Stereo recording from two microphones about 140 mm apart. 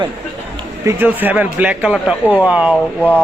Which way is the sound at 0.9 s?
15° right (ahead or behind).